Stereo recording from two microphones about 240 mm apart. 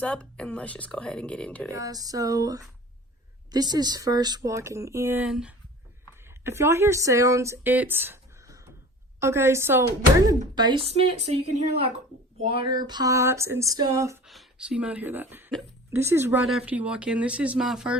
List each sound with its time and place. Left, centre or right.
0.0 s speech: centre
1.7 s a woman's voice: centre
14.3 s speech: centre